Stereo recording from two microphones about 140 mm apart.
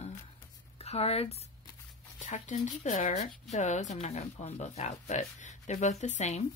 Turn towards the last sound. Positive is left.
turn(degrees=55)  # may be behind; listen again after turning